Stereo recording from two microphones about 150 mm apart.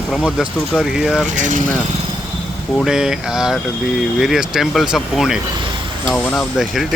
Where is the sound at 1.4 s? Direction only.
55° right (ahead or behind).